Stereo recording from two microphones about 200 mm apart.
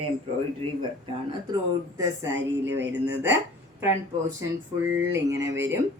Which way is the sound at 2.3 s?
65° right (ahead or behind).